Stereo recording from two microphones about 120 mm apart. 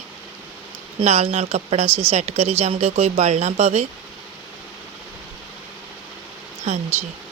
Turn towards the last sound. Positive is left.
turn(degrees=-70)  # may be behind; listen again after turning